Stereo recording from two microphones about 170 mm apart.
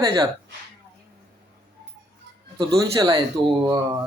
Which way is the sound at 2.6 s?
20° right (ahead or behind).